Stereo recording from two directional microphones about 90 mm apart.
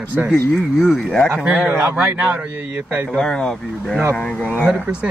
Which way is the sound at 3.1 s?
5° left (ahead or behind).